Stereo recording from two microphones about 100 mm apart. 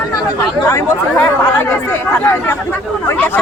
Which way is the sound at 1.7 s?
20° left (ahead or behind).